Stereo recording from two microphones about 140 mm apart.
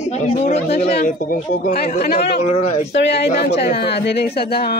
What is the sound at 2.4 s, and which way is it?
Speech, 55° left (ahead or behind).